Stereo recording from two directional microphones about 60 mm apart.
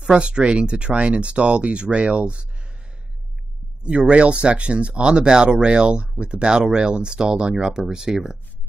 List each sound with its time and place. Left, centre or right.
0.0 s speech: centre
3.8 s speech: centre